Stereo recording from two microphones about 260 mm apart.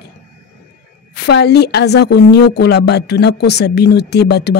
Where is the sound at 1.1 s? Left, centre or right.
Left.